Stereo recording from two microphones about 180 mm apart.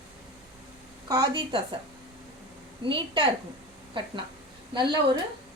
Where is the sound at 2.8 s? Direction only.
25° right (ahead or behind).